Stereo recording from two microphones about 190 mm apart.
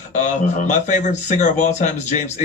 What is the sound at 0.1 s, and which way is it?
A man's voice, 40° left (ahead or behind).